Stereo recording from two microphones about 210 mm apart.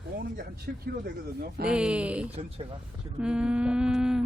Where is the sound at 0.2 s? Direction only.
45° right (ahead or behind).